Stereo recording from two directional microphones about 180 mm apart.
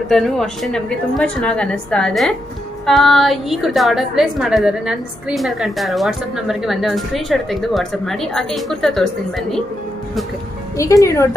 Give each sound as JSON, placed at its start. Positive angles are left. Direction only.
{"t": 0.1, "sound": "a woman's voice", "side_deg": 0}
{"t": 10.8, "sound": "speech", "side_deg": 15}